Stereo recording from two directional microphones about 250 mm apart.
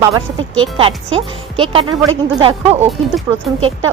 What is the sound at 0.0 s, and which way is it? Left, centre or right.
Speech, centre.